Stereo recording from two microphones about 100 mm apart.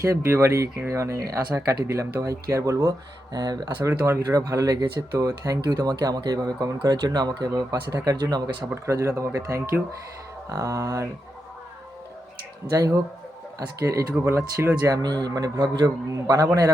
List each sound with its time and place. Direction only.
0.1 s speech: 30° right (ahead or behind)
3.3 s speech: 45° right (ahead or behind)
3.8 s speech: 30° right (ahead or behind)
8.7 s speech: 30° right (ahead or behind)
12.7 s speech: 35° right (ahead or behind)
14.3 s speech: 25° right (ahead or behind)
14.8 s speech: 45° right (ahead or behind)
16.0 s speech: 35° right (ahead or behind)